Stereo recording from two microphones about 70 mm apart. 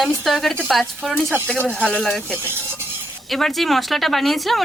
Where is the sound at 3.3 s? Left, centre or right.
Centre.